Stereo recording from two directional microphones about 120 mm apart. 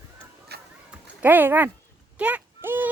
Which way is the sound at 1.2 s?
15° right (ahead or behind).